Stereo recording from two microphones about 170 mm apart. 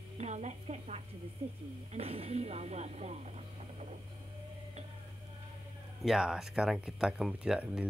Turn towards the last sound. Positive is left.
turn(degrees=-5)  # may be behind; listen again after turning